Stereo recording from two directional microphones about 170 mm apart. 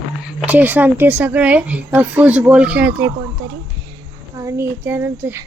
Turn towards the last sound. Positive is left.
turn(degrees=-15)  # may be behind; listen again after turning